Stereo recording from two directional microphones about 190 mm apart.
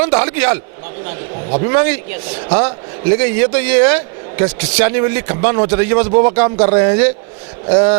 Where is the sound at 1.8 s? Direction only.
15° right (ahead or behind).